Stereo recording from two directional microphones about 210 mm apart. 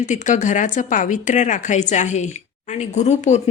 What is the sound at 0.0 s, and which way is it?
Speech, 35° left (ahead or behind).